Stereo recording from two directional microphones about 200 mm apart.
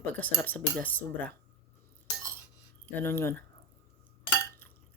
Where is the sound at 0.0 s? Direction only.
10° left (ahead or behind).